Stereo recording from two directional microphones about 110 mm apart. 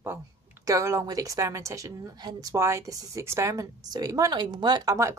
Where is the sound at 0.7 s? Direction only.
30° right (ahead or behind).